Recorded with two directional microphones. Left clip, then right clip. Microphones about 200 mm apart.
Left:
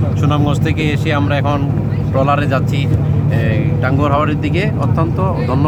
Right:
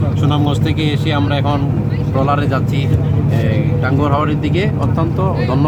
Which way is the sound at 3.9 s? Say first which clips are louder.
Left 1 dB; 20° left (ahead or behind).